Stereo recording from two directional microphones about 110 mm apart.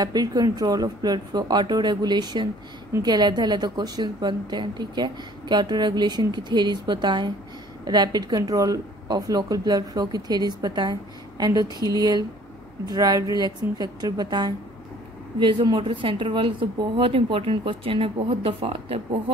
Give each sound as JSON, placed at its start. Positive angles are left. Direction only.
{"t": 0.0, "sound": "a woman's voice", "side_deg": -35}